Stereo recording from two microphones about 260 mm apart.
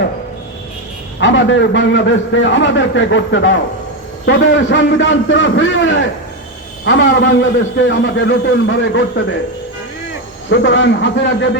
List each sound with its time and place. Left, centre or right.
1.2 s a man's voice: left
10.5 s a man's voice: left